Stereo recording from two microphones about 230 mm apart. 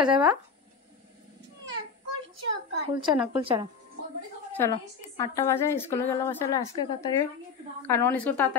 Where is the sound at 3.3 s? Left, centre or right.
Right.